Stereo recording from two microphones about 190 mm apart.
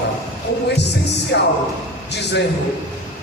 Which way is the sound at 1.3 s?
65° left (ahead or behind).